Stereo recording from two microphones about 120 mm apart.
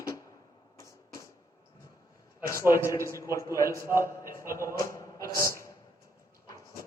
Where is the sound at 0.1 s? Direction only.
30° left (ahead or behind).